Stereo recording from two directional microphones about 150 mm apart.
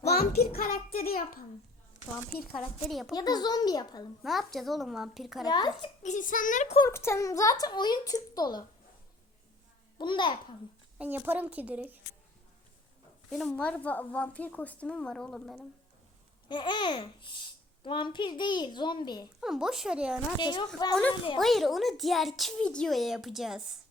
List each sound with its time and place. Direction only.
0.1 s a child's voice: 90° left
2.6 s speech: centre (ahead or behind)
3.2 s speech: 25° left (ahead or behind)
4.2 s speech: centre (ahead or behind)
5.5 s speech: 30° left (ahead or behind)
6.0 s a child's voice: 55° left (ahead or behind)
6.9 s speech: 15° left (ahead or behind)
10.0 s a child's voice: 30° left (ahead or behind)
10.9 s a woman's voice: 10° right (ahead or behind)
13.3 s a woman's voice: 5° left (ahead or behind)
16.5 s a child's voice: 30° left (ahead or behind)
19.4 s speech: 5° right (ahead or behind)
20.4 s speech: 30° left (ahead or behind)
20.9 s a woman's voice: 10° left (ahead or behind)